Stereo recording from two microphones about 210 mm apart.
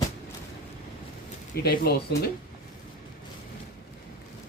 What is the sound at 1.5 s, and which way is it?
Speech, 45° left (ahead or behind).